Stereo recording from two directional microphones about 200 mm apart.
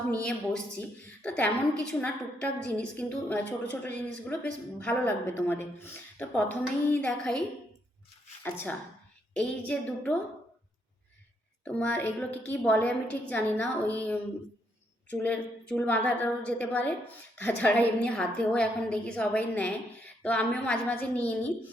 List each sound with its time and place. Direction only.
0.1 s a woman's voice: 5° left (ahead or behind)
8.4 s a woman's voice: 10° left (ahead or behind)
11.6 s a woman's voice: 5° left (ahead or behind)